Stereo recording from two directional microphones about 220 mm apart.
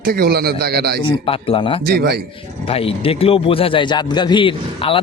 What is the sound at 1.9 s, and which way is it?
Speech, 45° right (ahead or behind).